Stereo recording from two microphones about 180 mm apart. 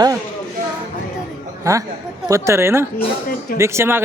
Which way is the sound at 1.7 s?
20° right (ahead or behind).